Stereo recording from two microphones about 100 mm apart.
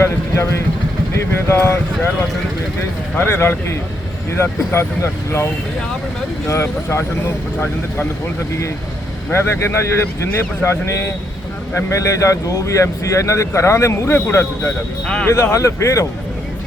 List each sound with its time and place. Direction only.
0.0 s speech: 25° left (ahead or behind)
3.2 s speech: 25° left (ahead or behind)
6.5 s speech: 25° left (ahead or behind)
9.3 s speech: 25° left (ahead or behind)
15.0 s speech: 10° left (ahead or behind)
15.3 s speech: 30° left (ahead or behind)